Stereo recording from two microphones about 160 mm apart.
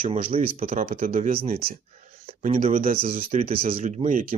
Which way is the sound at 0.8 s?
60° right (ahead or behind).